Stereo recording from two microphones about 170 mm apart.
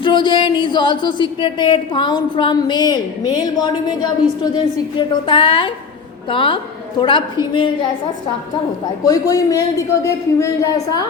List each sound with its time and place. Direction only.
0.0 s speech: 30° left (ahead or behind)
9.0 s speech: 20° left (ahead or behind)